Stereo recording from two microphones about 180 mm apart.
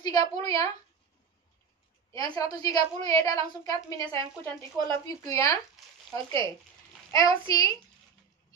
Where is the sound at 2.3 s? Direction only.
20° left (ahead or behind).